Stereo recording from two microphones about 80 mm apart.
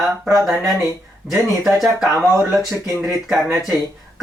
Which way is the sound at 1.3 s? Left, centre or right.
Centre.